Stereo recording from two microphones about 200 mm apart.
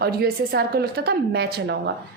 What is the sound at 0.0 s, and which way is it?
A woman's voice, 50° right (ahead or behind).